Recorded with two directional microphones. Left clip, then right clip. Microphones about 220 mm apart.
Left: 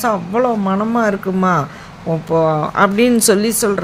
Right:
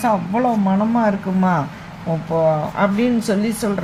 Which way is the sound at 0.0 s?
25° left (ahead or behind).